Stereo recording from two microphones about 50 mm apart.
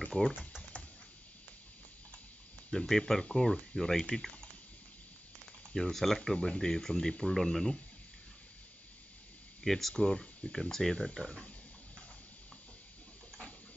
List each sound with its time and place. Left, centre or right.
0.2 s speech: left
2.9 s speech: centre
5.8 s speech: centre
9.6 s speech: centre
9.9 s speech: centre